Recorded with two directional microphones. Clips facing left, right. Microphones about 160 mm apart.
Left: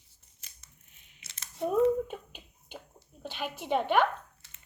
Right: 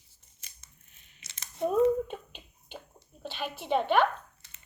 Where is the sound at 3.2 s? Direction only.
15° left (ahead or behind).